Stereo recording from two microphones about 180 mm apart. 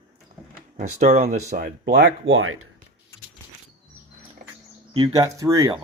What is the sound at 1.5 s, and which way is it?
Speech, 55° right (ahead or behind).